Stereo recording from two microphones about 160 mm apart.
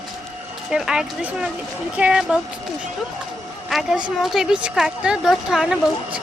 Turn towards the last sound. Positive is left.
turn(degrees=-5)  # may be behind; listen again after turning